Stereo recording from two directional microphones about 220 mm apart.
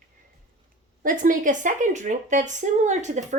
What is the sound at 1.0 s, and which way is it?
A woman's voice, 40° right (ahead or behind).